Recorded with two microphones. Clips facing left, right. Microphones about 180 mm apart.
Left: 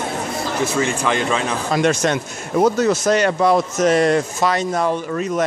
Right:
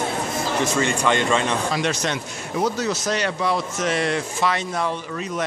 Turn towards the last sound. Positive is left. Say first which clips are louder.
# left 7 dB
turn(degrees=45)  # may be behind; listen again after turning